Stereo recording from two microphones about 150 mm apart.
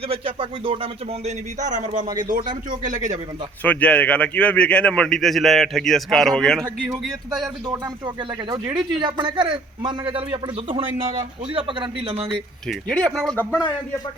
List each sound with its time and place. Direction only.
0.1 s speech: 35° right (ahead or behind)
1.5 s speech: 55° right (ahead or behind)
3.6 s a man's voice: 10° left (ahead or behind)
7.4 s speech: 25° right (ahead or behind)
12.6 s a man's voice: 5° left (ahead or behind)